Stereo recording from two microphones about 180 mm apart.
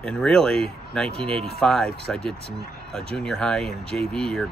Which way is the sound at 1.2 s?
30° right (ahead or behind).